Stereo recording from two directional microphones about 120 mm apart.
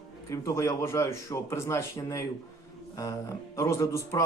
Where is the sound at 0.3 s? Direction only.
25° left (ahead or behind).